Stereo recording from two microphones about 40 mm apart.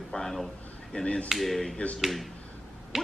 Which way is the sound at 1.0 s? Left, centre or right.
Left.